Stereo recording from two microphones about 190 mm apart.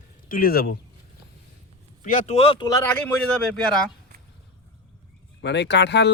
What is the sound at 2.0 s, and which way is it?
Speech, 45° left (ahead or behind).